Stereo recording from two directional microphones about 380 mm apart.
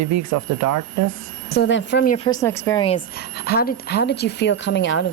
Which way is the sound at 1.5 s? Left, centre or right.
Left.